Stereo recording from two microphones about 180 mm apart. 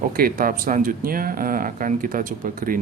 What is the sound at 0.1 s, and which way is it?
Speech, 55° right (ahead or behind).